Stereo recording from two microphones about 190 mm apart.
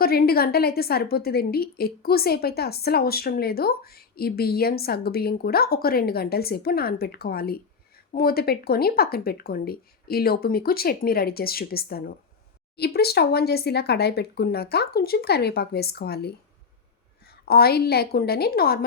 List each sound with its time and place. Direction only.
0.0 s a woman's voice: 55° left (ahead or behind)